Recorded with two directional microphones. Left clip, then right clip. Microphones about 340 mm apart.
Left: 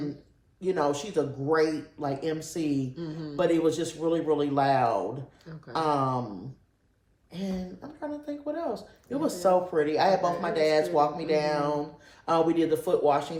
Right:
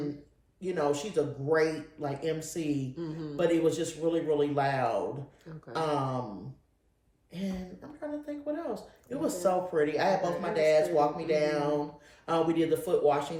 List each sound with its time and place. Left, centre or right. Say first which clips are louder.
0.6 s speech: left 3 dB; centre
2.9 s speech: left 1 dB; centre
3.3 s speech: left 2 dB; centre
7.3 s speech: left 3 dB; centre